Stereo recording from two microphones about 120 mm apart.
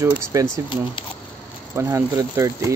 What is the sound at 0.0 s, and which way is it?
Speech, 25° right (ahead or behind).